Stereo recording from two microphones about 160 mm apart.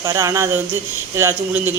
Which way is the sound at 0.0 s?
20° right (ahead or behind).